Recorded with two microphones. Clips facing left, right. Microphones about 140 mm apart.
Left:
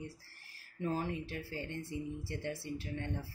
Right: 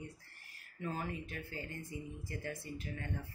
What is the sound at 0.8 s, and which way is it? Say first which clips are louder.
Speech: left 4 dB; 30° left (ahead or behind).